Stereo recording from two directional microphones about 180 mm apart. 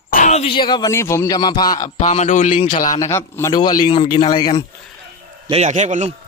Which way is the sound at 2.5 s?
30° left (ahead or behind).